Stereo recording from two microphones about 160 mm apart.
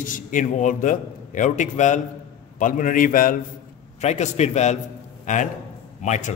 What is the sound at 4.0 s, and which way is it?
A man's voice, 45° left (ahead or behind).